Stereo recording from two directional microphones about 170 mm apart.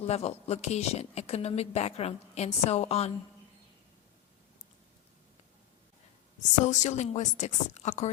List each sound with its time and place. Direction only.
0.0 s speech: 40° left (ahead or behind)
6.7 s speech: 45° left (ahead or behind)